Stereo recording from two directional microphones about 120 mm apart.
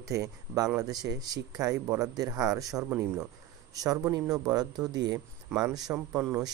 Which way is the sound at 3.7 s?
30° right (ahead or behind).